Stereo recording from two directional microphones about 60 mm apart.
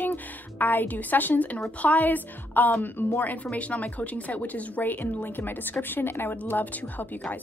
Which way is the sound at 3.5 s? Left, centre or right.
Left.